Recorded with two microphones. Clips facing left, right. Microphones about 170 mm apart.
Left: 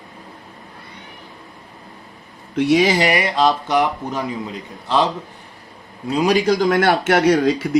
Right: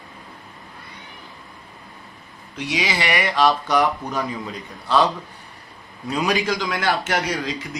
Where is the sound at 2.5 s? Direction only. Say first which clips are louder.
Left 10 dB; 50° left (ahead or behind); by 4.2 s 25° left (ahead or behind).